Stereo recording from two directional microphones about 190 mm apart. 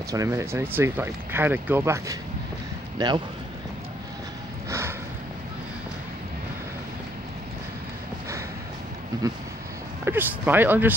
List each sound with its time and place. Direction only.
0.1 s speech: 15° right (ahead or behind)
4.6 s a sound: 15° right (ahead or behind)
9.1 s speech: 20° right (ahead or behind)
10.0 s speech: 10° right (ahead or behind)